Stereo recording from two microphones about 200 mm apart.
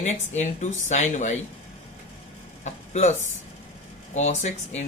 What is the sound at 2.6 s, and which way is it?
Speech, 35° left (ahead or behind).